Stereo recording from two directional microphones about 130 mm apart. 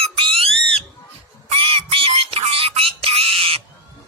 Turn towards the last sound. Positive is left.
turn(degrees=-45)  # may be behind; listen again after turning